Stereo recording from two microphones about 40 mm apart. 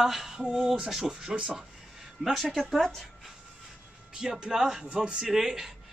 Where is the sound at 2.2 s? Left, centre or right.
Centre.